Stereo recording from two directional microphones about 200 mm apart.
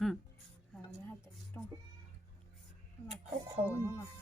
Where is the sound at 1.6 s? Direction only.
10° left (ahead or behind).